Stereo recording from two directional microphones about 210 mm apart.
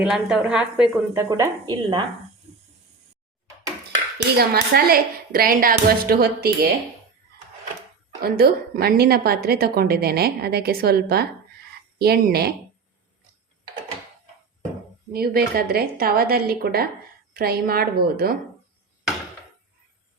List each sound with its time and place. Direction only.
0.0 s a woman's voice: 5° right (ahead or behind); by 2.0 s 20° right (ahead or behind)
4.4 s a woman's voice: 50° right (ahead or behind)
8.2 s a woman's voice: 45° right (ahead or behind)
15.1 s a woman's voice: 45° right (ahead or behind)